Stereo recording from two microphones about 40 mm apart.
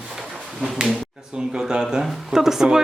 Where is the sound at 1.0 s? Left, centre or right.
Centre.